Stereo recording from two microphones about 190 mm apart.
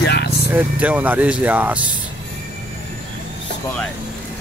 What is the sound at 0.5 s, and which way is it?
Speech, 10° right (ahead or behind).